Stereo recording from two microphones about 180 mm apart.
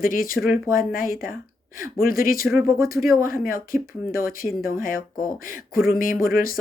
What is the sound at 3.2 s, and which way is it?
Speech, 50° left (ahead or behind).